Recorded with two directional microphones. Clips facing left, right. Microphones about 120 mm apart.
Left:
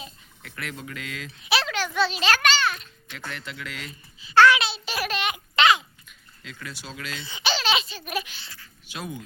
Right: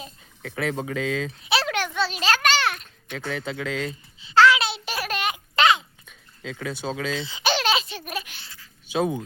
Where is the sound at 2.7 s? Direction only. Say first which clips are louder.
Right 5 dB; 50° right (ahead or behind).